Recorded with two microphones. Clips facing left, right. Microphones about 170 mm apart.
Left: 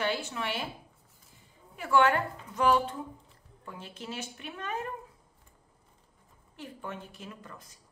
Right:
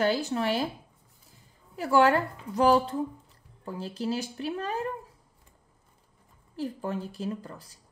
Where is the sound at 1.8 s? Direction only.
35° right (ahead or behind).